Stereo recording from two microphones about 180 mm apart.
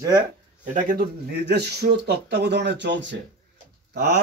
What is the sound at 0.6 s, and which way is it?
Speech, 45° right (ahead or behind).